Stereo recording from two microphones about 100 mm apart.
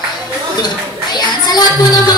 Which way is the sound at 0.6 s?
45° left (ahead or behind).